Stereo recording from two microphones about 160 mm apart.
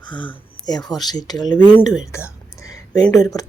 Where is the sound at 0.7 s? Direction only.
25° left (ahead or behind).